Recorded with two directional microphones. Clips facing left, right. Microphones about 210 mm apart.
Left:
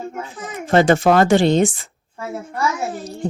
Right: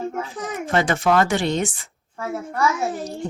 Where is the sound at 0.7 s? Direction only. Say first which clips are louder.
Left 6 dB; 30° left (ahead or behind).